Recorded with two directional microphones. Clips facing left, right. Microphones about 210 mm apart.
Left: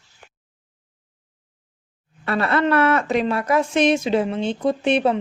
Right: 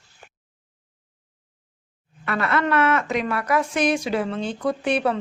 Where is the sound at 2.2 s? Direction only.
30° left (ahead or behind).